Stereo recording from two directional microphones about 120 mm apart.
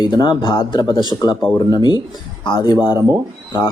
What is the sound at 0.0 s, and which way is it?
Speech, 35° left (ahead or behind).